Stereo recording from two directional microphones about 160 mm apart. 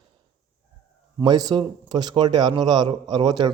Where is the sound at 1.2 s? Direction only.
25° right (ahead or behind).